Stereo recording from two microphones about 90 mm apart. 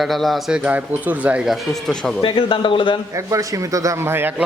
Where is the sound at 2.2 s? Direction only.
70° left (ahead or behind).